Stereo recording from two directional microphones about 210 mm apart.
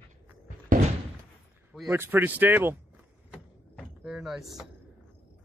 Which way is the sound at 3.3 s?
Centre (ahead or behind).